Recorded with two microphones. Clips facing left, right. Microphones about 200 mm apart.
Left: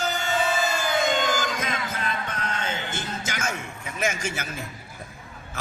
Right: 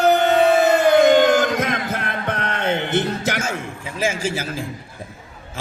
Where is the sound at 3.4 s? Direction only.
30° right (ahead or behind).